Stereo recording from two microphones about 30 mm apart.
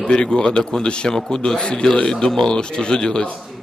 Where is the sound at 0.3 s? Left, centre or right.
Left.